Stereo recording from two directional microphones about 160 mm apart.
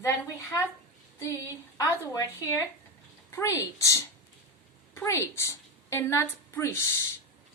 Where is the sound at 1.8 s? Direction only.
20° left (ahead or behind).